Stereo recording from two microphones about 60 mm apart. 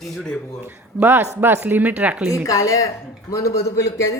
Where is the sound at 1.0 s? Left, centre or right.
Right.